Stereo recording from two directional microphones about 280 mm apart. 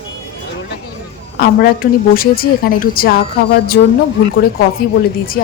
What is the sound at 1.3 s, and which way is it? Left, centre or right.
A woman's voice, left.